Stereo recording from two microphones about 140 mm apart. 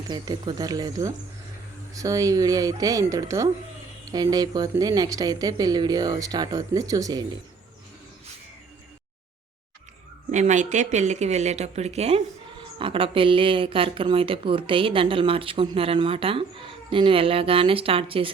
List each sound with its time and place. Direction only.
0.1 s speech: 30° right (ahead or behind)
10.3 s a woman's voice: 60° right (ahead or behind); by 18.3 s 40° right (ahead or behind)